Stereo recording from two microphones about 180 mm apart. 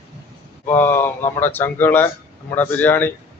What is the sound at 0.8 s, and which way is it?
Speech, 15° left (ahead or behind).